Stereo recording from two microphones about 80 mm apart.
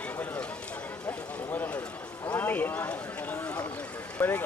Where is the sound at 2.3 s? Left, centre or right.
Left.